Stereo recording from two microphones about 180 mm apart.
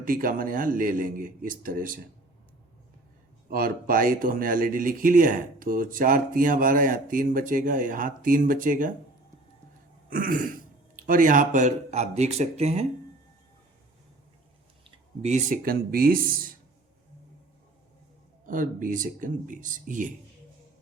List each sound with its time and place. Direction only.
0.0 s speech: 50° right (ahead or behind)
3.5 s speech: 55° right (ahead or behind)
10.1 s speech: 50° right (ahead or behind)
14.8 s speech: 40° right (ahead or behind)
18.4 s speech: 50° right (ahead or behind)